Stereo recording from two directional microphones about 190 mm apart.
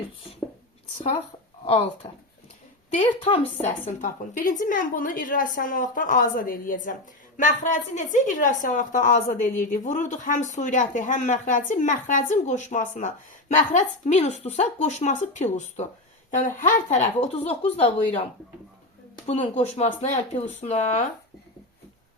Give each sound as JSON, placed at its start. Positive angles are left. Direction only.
{"t": 1.6, "sound": "a woman's voice", "side_deg": 30}
{"t": 4.0, "sound": "a woman's voice", "side_deg": 45}
{"t": 19.2, "sound": "speech", "side_deg": 35}